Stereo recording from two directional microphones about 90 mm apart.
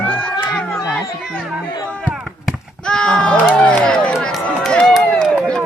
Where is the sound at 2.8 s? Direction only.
10° left (ahead or behind).